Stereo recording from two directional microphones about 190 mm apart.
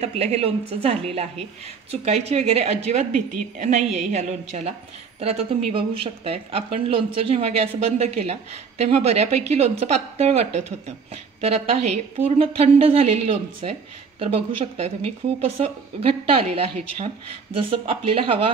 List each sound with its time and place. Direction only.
0.0 s speech: 35° right (ahead or behind)